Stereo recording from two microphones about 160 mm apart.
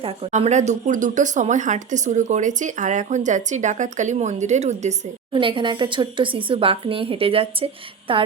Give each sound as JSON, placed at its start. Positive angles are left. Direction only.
{"t": 0.0, "sound": "speech", "side_deg": -40}
{"t": 5.3, "sound": "speech", "side_deg": -30}